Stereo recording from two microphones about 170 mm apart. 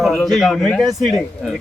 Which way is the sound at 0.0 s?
Centre (ahead or behind).